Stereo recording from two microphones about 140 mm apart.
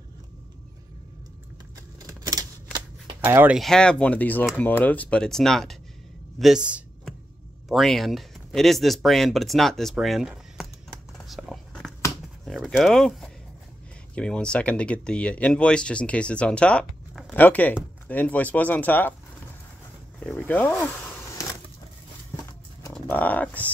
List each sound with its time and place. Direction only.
2.0 s scissors: 25° right (ahead or behind)
3.3 s speech: 15° right (ahead or behind)
3.5 s speech: 5° left (ahead or behind)
11.1 s a sound: centre (ahead or behind)
12.4 s speech: centre (ahead or behind)
20.2 s speech: 10° left (ahead or behind)
23.0 s bird: 10° left (ahead or behind)